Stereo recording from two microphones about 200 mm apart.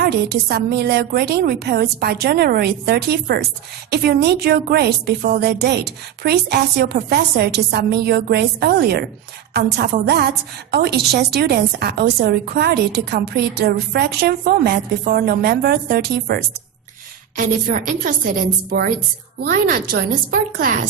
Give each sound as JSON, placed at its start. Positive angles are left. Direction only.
{"t": 0.0, "sound": "a woman's voice", "side_deg": -55}
{"t": 19.4, "sound": "a woman's voice", "side_deg": -45}